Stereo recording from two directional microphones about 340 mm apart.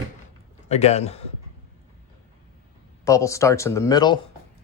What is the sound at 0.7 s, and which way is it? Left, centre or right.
Speech, centre.